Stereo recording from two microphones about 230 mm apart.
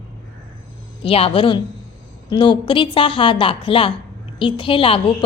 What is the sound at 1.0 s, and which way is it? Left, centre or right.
A woman's voice, left.